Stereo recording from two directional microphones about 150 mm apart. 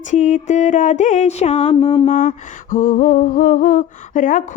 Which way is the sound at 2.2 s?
60° left (ahead or behind).